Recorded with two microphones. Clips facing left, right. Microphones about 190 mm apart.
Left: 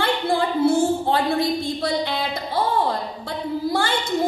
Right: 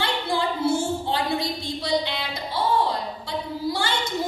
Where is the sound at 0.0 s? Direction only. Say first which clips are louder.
Left 4 dB; 55° left (ahead or behind).